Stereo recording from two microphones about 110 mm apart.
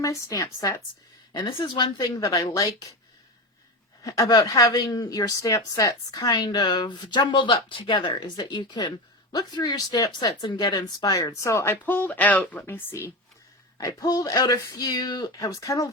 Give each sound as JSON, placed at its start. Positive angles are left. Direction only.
{"t": 0.0, "sound": "speech", "side_deg": 30}
{"t": 1.3, "sound": "a woman's voice", "side_deg": 50}
{"t": 4.0, "sound": "a woman's voice", "side_deg": 35}
{"t": 13.7, "sound": "a woman's voice", "side_deg": 35}